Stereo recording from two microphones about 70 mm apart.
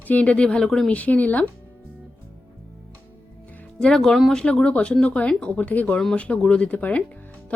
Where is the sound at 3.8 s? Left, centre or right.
Centre.